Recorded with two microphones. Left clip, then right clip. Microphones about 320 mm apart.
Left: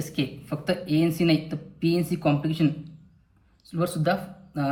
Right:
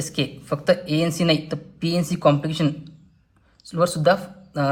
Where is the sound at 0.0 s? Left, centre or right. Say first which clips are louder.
Right 4 dB; centre.